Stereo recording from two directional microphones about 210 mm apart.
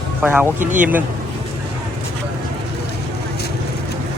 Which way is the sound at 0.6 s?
40° right (ahead or behind).